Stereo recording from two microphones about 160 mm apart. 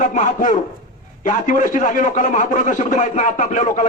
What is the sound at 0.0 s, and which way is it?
A man's voice, 50° left (ahead or behind).